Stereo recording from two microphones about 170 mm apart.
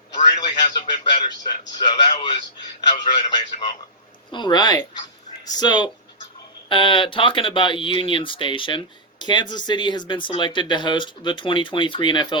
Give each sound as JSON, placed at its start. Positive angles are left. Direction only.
{"t": 0.1, "sound": "a man's voice", "side_deg": 25}